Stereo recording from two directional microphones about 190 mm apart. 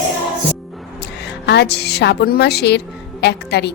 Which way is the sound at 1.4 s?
60° left (ahead or behind).